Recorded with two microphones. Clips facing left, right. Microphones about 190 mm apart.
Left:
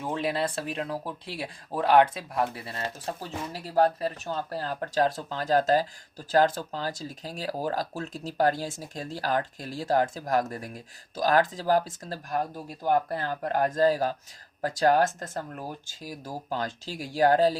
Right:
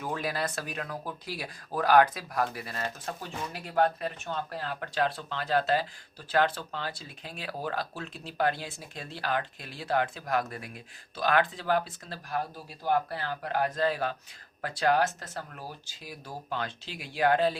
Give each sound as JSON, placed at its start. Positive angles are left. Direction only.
{"t": 0.0, "sound": "speech", "side_deg": 25}